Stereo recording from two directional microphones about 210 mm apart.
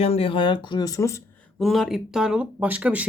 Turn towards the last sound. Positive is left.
turn(degrees=-5)  # may be behind; listen again after turning